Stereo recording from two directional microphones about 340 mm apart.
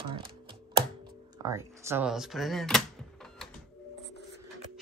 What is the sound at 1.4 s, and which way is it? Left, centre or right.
Speech, centre.